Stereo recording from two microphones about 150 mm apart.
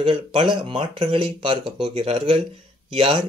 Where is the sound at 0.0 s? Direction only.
35° right (ahead or behind).